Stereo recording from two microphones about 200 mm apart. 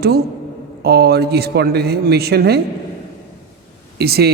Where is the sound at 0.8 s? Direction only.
50° right (ahead or behind).